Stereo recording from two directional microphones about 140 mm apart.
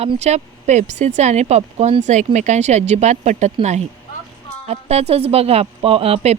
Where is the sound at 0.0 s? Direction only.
50° right (ahead or behind).